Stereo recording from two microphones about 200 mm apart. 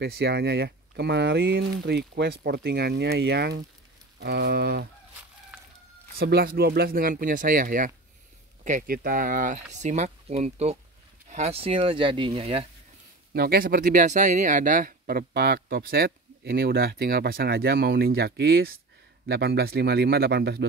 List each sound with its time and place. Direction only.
0.0 s a man's voice: 55° right (ahead or behind)
5.5 s chicken: 5° right (ahead or behind)
6.1 s speech: 50° right (ahead or behind); by 12.6 s 30° right (ahead or behind)
13.3 s a man's voice: 50° right (ahead or behind)